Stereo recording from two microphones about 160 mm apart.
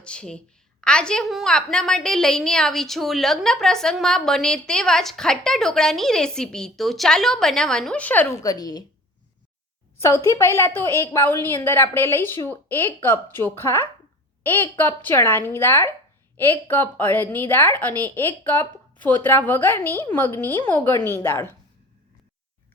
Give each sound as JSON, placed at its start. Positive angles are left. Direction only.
{"t": 0.0, "sound": "a woman's voice", "side_deg": 5}
{"t": 10.0, "sound": "a woman's voice", "side_deg": 20}